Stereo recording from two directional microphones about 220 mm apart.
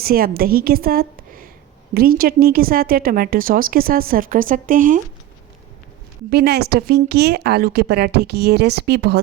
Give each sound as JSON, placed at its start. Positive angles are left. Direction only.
{"t": 0.0, "sound": "a woman's voice", "side_deg": -40}
{"t": 6.3, "sound": "a woman's voice", "side_deg": -45}